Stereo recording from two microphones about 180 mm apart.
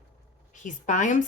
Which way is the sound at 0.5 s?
45° left (ahead or behind).